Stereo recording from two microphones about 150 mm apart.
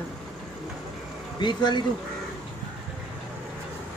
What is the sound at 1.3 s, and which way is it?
Speech, 30° left (ahead or behind).